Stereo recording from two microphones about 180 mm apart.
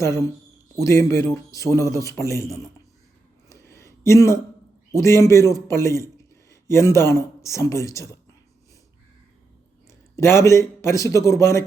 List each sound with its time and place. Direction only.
0.8 s a man's voice: 15° left (ahead or behind)
3.5 s a sound: 15° left (ahead or behind)
4.9 s a man's voice: 15° left (ahead or behind)
10.2 s a man's voice: 15° left (ahead or behind)